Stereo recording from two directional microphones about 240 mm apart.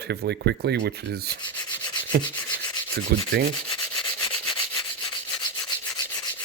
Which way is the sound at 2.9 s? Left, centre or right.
Right.